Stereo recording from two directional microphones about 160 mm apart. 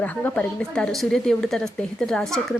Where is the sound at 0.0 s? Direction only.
10° left (ahead or behind).